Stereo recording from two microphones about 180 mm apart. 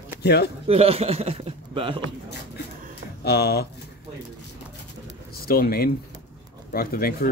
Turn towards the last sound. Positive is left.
turn(degrees=55)  # may be behind; listen again after turning